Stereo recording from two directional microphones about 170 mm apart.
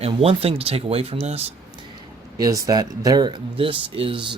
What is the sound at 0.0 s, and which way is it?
Speech, 35° right (ahead or behind).